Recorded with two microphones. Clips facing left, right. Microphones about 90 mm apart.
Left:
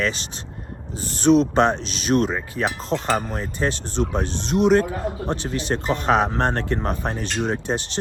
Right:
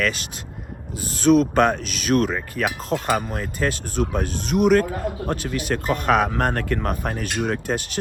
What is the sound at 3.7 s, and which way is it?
Speech, 50° right (ahead or behind).